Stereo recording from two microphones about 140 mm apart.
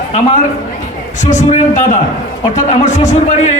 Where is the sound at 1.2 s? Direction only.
60° left (ahead or behind).